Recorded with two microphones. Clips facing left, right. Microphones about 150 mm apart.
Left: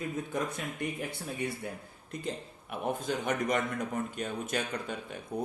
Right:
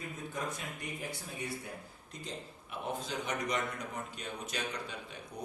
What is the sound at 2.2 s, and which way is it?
Speech, 55° left (ahead or behind).